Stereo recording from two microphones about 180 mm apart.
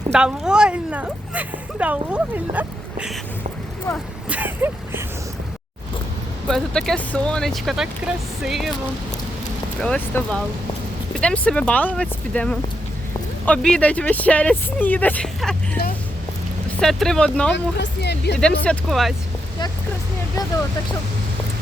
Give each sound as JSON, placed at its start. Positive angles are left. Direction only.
{"t": 0.1, "sound": "speech", "side_deg": -5}
{"t": 4.3, "sound": "speech", "side_deg": -10}
{"t": 6.5, "sound": "speech", "side_deg": 5}
{"t": 9.8, "sound": "speech", "side_deg": 5}
{"t": 16.8, "sound": "speech", "side_deg": 0}
{"t": 17.5, "sound": "speech", "side_deg": 70}
{"t": 18.3, "sound": "speech", "side_deg": 5}